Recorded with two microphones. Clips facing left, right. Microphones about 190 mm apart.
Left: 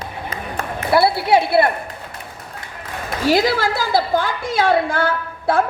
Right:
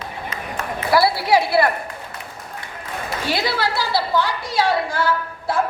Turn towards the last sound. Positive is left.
turn(degrees=55)  # may be behind; listen again after turning